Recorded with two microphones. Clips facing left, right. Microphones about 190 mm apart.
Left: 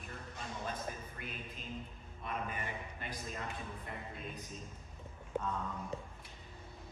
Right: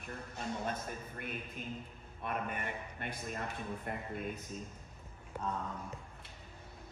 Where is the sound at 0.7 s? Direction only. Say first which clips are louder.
Right 2 dB; 55° right (ahead or behind).